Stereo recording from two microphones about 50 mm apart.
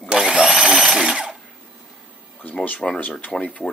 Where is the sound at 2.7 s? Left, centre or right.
Left.